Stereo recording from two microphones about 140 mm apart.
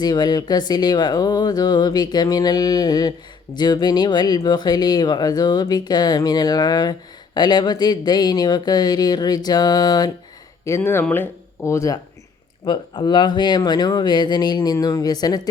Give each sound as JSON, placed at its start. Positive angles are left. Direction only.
{"t": 0.0, "sound": "speech", "side_deg": 30}
{"t": 10.7, "sound": "speech", "side_deg": 15}
{"t": 12.6, "sound": "speech", "side_deg": 30}